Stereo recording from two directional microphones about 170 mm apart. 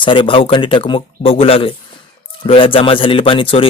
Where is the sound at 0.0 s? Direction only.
30° left (ahead or behind).